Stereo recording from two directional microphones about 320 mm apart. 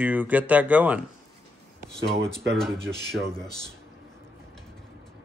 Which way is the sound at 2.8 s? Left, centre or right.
Centre.